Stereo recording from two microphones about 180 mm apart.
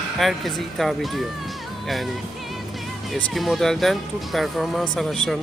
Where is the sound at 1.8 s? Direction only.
Centre (ahead or behind).